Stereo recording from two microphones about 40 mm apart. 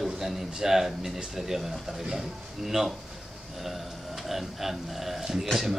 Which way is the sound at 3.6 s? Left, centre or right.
Centre.